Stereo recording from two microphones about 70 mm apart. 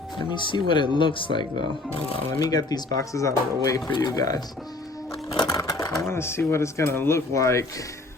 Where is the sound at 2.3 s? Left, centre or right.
Left.